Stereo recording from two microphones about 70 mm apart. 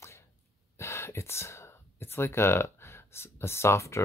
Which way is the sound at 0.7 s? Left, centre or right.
Left.